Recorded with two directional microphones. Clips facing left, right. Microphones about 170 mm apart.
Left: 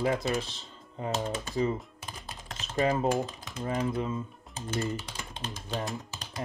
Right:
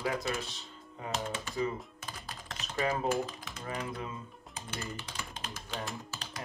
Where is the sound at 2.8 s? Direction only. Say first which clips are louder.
Left 4 dB; 35° left (ahead or behind).